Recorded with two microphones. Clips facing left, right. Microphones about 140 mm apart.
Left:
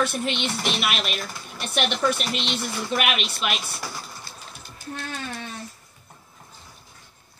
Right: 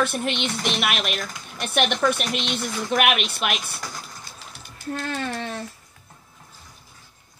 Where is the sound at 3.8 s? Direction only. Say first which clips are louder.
Left 1 dB; 5° left (ahead or behind).